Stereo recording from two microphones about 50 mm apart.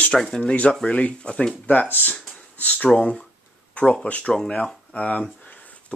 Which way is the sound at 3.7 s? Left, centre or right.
Left.